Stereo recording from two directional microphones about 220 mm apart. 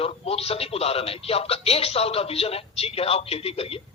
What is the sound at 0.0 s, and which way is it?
Speech, 25° left (ahead or behind).